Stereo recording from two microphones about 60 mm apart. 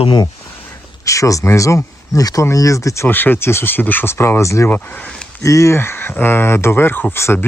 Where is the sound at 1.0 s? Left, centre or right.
Left.